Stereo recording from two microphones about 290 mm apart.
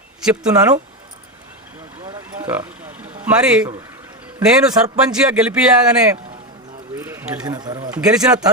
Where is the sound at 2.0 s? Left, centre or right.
Centre.